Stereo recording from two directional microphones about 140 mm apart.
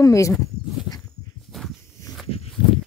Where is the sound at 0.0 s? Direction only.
20° left (ahead or behind).